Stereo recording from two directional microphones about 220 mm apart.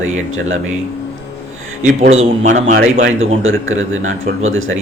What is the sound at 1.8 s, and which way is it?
Speech, 30° right (ahead or behind).